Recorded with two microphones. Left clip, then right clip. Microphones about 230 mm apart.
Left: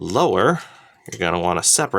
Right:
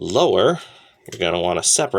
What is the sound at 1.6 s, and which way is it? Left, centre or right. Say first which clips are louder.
Speech: even; left.